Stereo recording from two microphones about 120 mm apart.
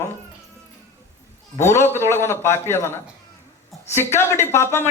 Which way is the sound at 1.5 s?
20° left (ahead or behind).